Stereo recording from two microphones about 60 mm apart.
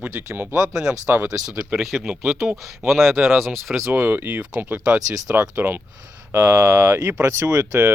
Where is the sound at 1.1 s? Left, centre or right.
Right.